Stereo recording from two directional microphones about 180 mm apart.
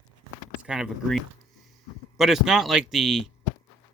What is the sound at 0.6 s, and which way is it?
Speech, 5° right (ahead or behind).